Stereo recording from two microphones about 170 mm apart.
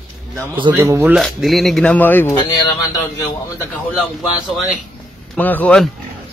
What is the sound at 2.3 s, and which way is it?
Speech, 25° left (ahead or behind).